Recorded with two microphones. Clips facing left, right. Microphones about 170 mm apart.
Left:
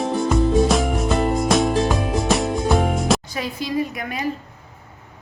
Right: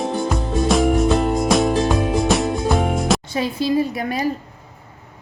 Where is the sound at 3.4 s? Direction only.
30° right (ahead or behind).